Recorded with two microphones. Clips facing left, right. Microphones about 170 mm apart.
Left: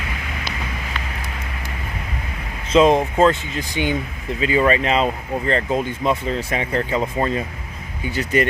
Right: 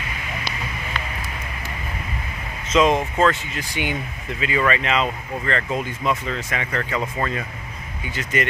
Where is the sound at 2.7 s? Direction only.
30° left (ahead or behind).